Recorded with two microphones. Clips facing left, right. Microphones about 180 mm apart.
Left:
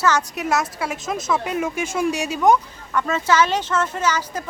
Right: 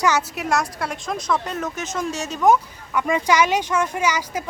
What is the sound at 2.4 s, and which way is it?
Speech, 5° right (ahead or behind).